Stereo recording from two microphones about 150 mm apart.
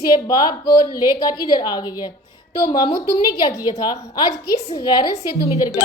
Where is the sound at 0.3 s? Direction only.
30° left (ahead or behind).